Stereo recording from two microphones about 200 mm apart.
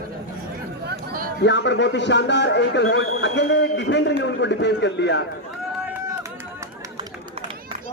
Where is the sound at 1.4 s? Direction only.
60° left (ahead or behind).